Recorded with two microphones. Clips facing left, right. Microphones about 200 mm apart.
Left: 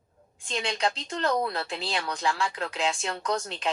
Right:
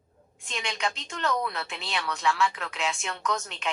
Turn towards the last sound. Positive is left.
turn(degrees=35)  # may be behind; listen again after turning